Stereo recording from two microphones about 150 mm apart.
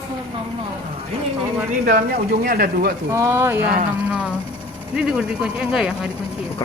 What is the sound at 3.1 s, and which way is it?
Speech, 20° right (ahead or behind).